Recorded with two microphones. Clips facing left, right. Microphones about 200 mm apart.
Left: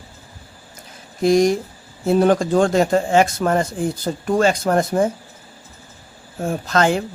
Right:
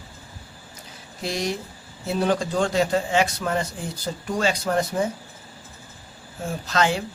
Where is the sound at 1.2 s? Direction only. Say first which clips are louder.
Left 12 dB; 50° left (ahead or behind).